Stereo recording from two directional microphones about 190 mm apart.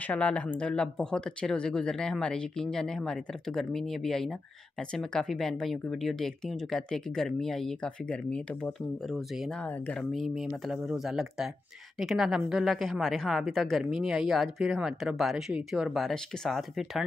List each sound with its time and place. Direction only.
0.0 s speech: 5° left (ahead or behind)